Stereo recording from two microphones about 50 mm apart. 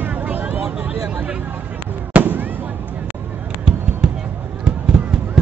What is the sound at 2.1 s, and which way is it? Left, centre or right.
Fireworks, right.